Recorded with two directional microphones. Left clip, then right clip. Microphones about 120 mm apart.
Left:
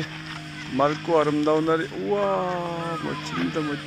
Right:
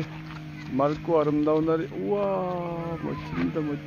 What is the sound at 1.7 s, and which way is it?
Speech, 10° left (ahead or behind).